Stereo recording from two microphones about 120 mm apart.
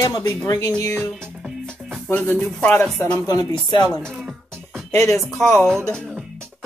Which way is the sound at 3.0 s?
30° left (ahead or behind).